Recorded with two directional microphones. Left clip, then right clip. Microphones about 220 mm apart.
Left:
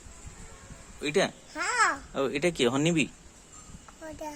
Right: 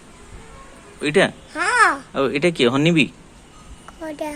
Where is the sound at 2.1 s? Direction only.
5° left (ahead or behind).